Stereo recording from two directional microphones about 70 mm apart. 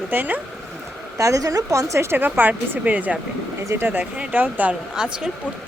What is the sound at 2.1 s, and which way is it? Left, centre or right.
Speech, right.